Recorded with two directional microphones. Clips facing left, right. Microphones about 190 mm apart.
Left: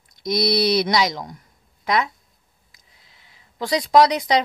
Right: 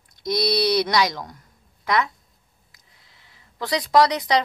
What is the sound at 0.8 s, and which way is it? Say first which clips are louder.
A woman's voice: left 1 dB; 15° left (ahead or behind).